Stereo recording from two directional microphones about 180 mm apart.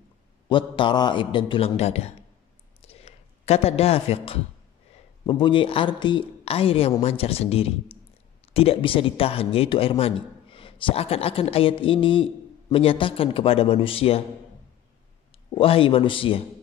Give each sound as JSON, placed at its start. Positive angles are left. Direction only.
{"t": 0.5, "sound": "a woman's voice", "side_deg": 25}
{"t": 2.9, "sound": "a sound", "side_deg": 35}
{"t": 5.2, "sound": "a woman's voice", "side_deg": 30}
{"t": 15.5, "sound": "a woman's voice", "side_deg": 30}